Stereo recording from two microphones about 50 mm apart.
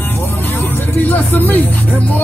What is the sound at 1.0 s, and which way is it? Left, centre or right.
Speech, left.